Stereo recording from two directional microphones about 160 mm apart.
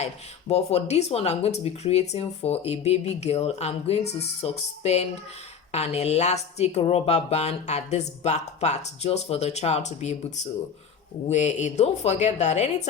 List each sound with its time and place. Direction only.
0.0 s a woman's voice: 40° left (ahead or behind)